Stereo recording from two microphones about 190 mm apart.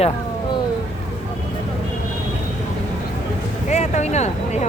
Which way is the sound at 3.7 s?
35° left (ahead or behind).